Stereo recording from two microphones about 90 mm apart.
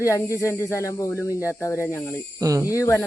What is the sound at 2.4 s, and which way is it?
Speech, 35° right (ahead or behind).